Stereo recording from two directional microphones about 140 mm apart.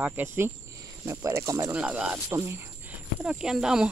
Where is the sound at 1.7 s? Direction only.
10° right (ahead or behind).